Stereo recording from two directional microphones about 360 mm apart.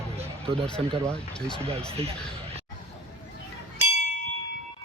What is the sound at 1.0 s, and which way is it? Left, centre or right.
Speech, centre.